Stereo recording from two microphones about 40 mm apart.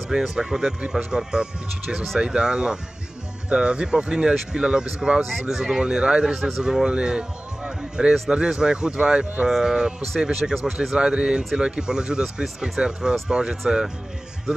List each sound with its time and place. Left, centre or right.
0.1 s speech: centre
0.7 s speech: right
9.5 s speech: centre
12.5 s speech: centre
13.3 s speech: right